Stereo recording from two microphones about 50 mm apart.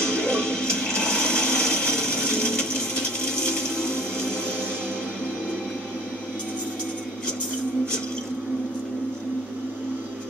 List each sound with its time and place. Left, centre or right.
0.0 s music: centre
2.2 s coin: centre
3.3 s a sound: centre